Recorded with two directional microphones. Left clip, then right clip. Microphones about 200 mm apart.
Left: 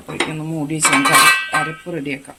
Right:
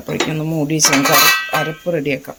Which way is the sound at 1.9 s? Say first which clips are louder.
Right 8 dB; 40° right (ahead or behind).